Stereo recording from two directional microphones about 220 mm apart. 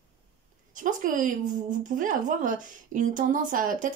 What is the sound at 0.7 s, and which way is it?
A woman's voice, 35° right (ahead or behind).